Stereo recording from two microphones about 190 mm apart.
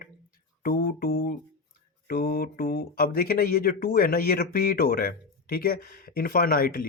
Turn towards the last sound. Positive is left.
turn(degrees=50)  # may be behind; listen again after turning